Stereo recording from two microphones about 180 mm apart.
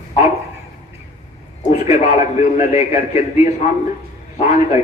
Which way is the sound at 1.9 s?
40° left (ahead or behind).